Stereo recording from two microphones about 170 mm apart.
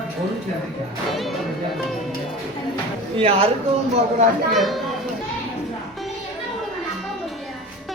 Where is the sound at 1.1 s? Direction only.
Centre (ahead or behind).